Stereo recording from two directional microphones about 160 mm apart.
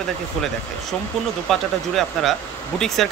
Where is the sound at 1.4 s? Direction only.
Centre (ahead or behind).